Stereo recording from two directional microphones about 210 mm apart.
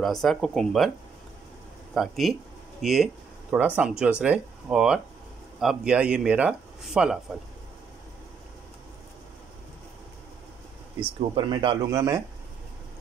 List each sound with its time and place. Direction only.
0.0 s speech: centre (ahead or behind)
2.0 s speech: centre (ahead or behind)
11.1 s speech: 25° right (ahead or behind)